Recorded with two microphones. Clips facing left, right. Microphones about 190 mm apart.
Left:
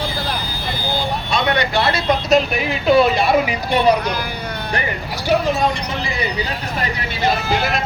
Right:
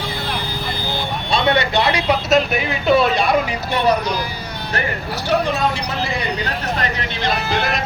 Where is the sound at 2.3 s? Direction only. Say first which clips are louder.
Left 1 dB; centre (ahead or behind).